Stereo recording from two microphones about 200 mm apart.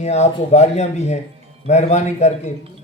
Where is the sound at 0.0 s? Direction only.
35° left (ahead or behind).